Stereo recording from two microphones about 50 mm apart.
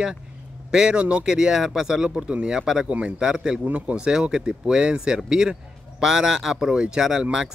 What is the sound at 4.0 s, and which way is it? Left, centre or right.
Speech, centre.